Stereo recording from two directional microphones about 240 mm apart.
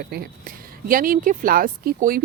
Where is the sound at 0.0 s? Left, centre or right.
Right.